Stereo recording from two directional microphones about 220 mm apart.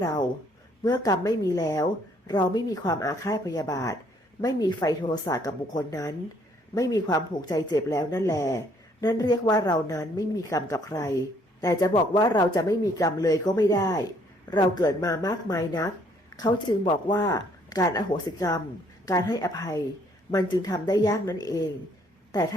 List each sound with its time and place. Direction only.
0.0 s speech: 15° left (ahead or behind)